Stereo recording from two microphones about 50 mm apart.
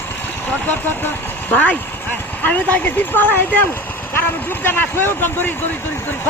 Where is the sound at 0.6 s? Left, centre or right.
Left.